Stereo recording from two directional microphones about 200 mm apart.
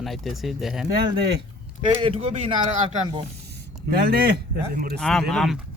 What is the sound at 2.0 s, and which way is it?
Speech, 30° right (ahead or behind).